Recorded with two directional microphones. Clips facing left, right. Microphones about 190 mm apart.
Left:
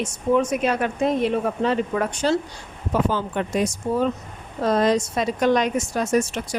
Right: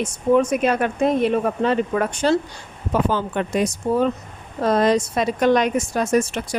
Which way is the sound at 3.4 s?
65° right (ahead or behind).